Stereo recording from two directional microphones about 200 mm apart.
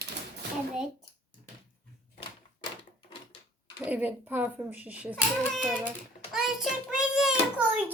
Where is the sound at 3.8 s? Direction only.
10° right (ahead or behind).